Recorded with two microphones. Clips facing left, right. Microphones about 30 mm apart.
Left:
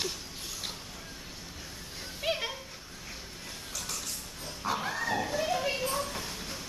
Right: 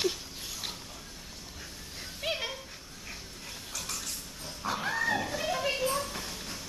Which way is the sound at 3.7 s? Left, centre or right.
Centre.